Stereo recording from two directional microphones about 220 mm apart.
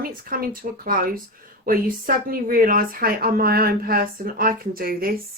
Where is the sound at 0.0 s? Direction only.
40° right (ahead or behind).